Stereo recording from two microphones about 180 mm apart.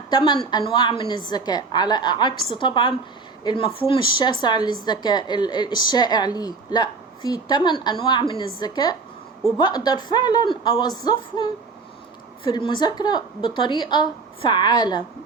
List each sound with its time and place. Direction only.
0.1 s a woman's voice: 25° left (ahead or behind)
12.5 s a woman's voice: 25° left (ahead or behind)